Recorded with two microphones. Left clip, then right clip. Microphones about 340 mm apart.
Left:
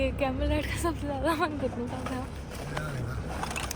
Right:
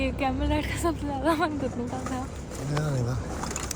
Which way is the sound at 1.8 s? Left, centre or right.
Centre.